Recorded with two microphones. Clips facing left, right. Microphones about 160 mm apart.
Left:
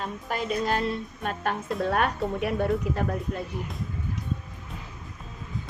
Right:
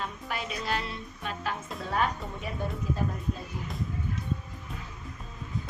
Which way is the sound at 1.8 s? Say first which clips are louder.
Left 4 dB; 65° left (ahead or behind).